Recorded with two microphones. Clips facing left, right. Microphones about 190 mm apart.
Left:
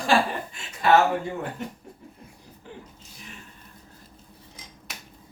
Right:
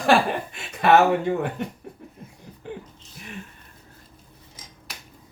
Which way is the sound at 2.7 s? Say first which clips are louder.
Right 7 dB; 60° right (ahead or behind).